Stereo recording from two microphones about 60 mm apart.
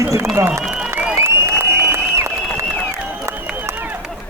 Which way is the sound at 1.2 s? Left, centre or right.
Right.